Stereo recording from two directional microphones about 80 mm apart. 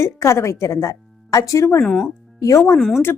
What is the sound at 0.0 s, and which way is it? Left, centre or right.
A woman's voice, left.